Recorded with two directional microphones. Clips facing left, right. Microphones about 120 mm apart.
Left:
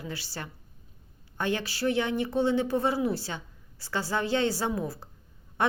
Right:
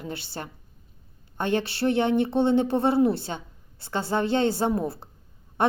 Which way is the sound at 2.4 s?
55° right (ahead or behind).